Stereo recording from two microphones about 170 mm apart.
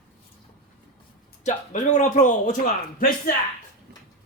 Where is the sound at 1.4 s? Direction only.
45° left (ahead or behind).